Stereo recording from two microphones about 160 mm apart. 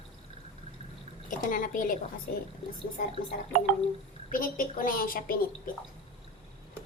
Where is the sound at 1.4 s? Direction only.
60° left (ahead or behind).